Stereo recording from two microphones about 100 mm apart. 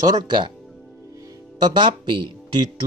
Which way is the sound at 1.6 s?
55° right (ahead or behind).